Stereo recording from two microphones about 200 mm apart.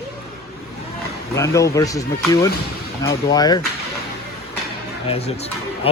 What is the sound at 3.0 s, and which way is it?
Speech, 20° left (ahead or behind).